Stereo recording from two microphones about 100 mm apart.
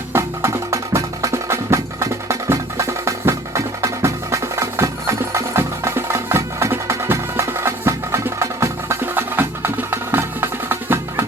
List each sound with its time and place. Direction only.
0.1 s music: 30° right (ahead or behind)